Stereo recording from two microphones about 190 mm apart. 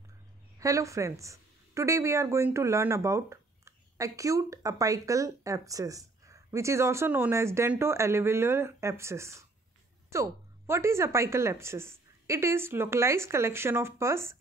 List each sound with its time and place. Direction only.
0.6 s speech: 15° right (ahead or behind)